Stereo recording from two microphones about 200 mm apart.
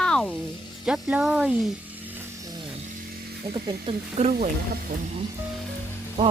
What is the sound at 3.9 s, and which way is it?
Speech, 35° right (ahead or behind).